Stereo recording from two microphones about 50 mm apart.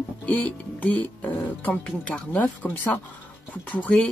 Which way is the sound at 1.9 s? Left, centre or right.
Left.